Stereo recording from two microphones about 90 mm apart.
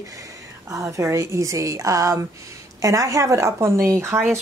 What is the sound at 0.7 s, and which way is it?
A woman's voice, 35° right (ahead or behind).